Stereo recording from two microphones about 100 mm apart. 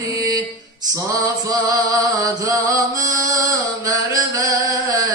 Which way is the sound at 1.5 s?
35° right (ahead or behind).